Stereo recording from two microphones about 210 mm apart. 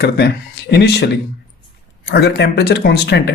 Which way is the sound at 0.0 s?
50° left (ahead or behind).